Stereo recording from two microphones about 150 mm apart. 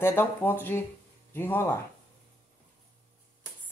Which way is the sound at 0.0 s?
15° left (ahead or behind).